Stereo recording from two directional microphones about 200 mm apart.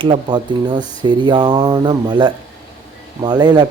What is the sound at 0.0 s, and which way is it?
Speech, 25° right (ahead or behind).